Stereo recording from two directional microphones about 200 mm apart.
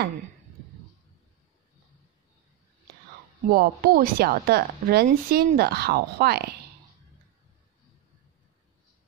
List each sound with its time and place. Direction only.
3.4 s a woman's voice: 45° right (ahead or behind)